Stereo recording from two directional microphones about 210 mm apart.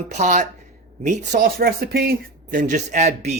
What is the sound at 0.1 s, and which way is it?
Speech, 35° right (ahead or behind).